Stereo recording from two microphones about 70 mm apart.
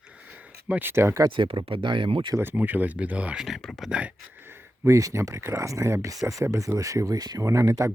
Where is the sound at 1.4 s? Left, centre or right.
Right.